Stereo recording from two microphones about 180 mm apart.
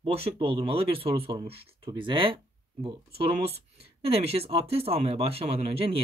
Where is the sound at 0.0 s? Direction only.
30° right (ahead or behind).